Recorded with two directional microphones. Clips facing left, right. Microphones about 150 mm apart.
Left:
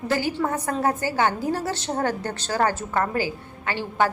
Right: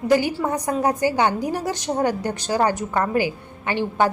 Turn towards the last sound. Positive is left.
turn(degrees=-20)  # may be behind; listen again after turning